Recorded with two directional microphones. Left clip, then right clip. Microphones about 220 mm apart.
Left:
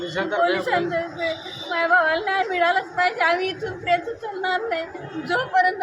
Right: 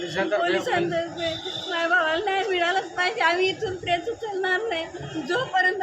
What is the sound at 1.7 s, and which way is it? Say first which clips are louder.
A woman's voice: left 4 dB; centre (ahead or behind).